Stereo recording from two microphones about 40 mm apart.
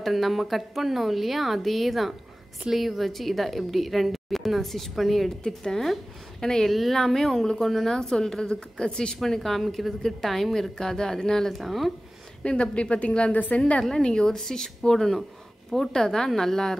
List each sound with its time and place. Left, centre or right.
0.0 s a woman's voice: centre
6.7 s a woman's voice: centre
11.5 s a woman's voice: centre
12.7 s speech: left
13.3 s a woman's voice: left
13.8 s a woman's voice: centre